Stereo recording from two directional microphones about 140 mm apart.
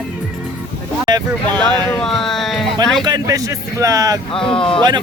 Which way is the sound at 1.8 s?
5° left (ahead or behind).